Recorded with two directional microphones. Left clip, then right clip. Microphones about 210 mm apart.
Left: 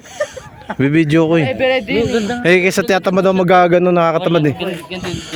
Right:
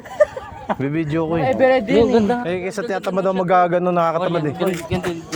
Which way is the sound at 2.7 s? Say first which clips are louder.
Left 8 dB; 50° left (ahead or behind).